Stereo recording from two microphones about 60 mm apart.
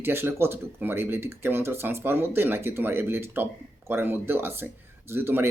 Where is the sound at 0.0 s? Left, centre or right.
Right.